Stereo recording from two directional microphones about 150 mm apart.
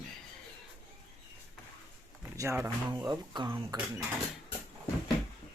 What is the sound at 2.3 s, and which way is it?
Speech, 15° right (ahead or behind).